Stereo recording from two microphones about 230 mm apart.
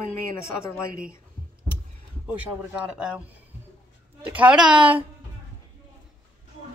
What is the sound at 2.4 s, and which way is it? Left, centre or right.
Speech, centre.